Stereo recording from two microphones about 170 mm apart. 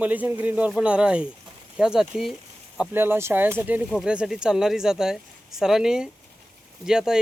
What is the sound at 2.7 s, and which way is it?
Speech, 10° right (ahead or behind).